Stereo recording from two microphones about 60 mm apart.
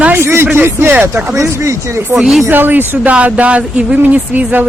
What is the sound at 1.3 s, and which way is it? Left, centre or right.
Speech, right.